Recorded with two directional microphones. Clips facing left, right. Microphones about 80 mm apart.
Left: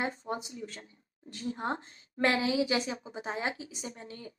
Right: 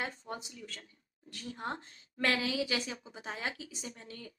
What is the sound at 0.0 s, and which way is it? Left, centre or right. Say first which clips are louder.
A woman's voice: left 5 dB; left.